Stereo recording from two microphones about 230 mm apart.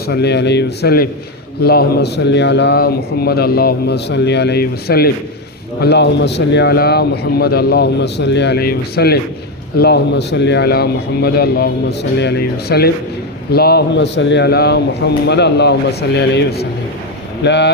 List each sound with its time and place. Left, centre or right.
0.1 s a man's voice: left